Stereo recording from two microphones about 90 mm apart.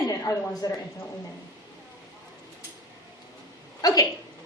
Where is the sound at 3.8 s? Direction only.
45° left (ahead or behind).